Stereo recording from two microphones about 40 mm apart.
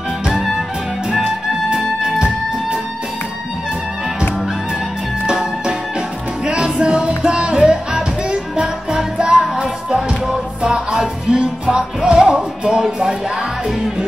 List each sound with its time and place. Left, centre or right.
1.8 s music: centre
5.2 s music: centre